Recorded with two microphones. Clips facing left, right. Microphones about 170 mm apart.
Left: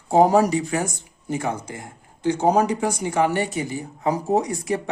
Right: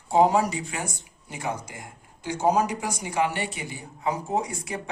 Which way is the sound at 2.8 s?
50° left (ahead or behind).